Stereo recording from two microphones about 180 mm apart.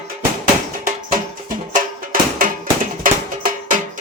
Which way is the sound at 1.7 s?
50° right (ahead or behind).